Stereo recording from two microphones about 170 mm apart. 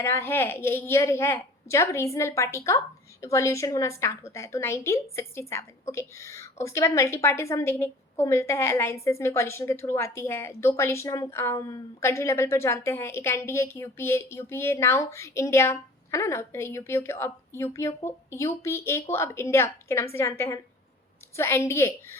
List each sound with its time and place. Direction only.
0.0 s a woman's voice: 15° left (ahead or behind)